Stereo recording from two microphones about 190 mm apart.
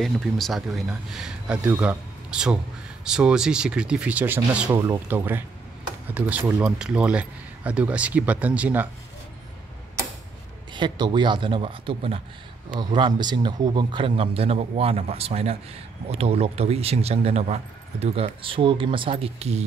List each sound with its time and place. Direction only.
0.0 s speech: centre (ahead or behind)
4.7 s speech: 25° right (ahead or behind)
5.0 s speech: 10° right (ahead or behind)
10.7 s a man's voice: 25° right (ahead or behind)